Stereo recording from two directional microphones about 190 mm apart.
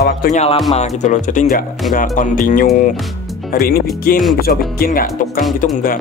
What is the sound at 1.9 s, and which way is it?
Music, 45° left (ahead or behind).